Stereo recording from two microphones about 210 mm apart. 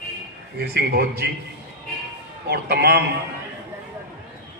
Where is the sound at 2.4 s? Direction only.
50° right (ahead or behind).